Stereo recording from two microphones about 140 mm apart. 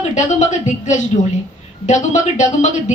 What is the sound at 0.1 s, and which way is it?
Speech, 60° left (ahead or behind).